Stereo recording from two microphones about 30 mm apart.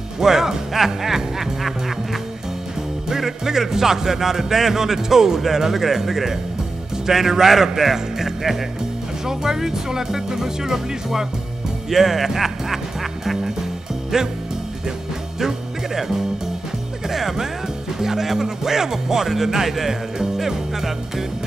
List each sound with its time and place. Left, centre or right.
0.2 s speech: centre
3.1 s speech: centre
15.4 s music: centre
17.1 s speech: centre
20.3 s music: centre